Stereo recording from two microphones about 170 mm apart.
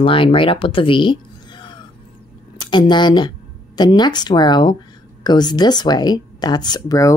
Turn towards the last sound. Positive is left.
turn(degrees=20)  # may be behind; listen again after turning